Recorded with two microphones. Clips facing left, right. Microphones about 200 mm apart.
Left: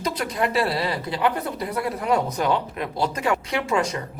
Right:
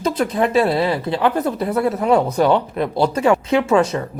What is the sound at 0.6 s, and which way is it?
Speech, 50° right (ahead or behind).